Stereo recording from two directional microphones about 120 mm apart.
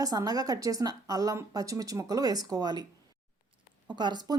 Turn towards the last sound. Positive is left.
turn(degrees=-35)  # may be behind; listen again after turning